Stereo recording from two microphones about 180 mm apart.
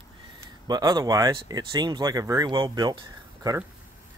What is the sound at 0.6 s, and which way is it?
Speech, 20° right (ahead or behind).